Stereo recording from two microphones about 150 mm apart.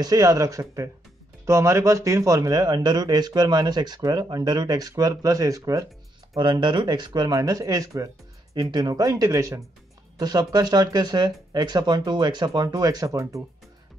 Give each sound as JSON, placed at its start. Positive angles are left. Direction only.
{"t": 0.0, "sound": "speech", "side_deg": -25}